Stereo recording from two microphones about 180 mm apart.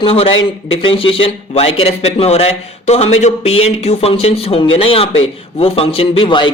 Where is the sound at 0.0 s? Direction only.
30° left (ahead or behind).